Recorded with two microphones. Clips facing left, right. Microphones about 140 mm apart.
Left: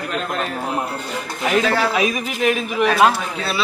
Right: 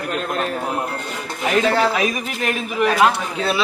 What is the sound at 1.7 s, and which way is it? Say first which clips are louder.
Speech: right 2 dB; 20° right (ahead or behind).